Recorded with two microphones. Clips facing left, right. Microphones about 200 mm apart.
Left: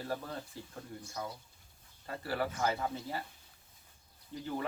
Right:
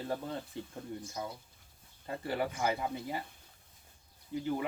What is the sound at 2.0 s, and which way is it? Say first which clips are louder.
Speech: right 1 dB; 20° right (ahead or behind).